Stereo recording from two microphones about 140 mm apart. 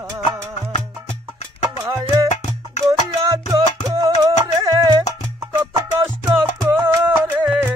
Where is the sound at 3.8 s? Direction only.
25° right (ahead or behind).